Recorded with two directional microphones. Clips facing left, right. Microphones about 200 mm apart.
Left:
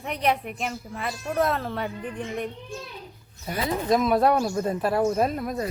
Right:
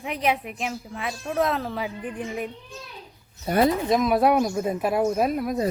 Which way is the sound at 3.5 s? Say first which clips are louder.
Right 9 dB; 35° right (ahead or behind).